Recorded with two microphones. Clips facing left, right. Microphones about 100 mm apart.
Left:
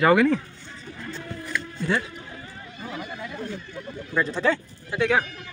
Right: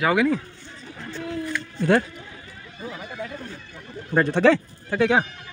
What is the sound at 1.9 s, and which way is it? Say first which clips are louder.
Speech: right 7 dB; 60° right (ahead or behind).